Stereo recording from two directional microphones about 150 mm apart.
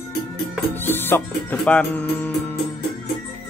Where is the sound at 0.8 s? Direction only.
15° left (ahead or behind).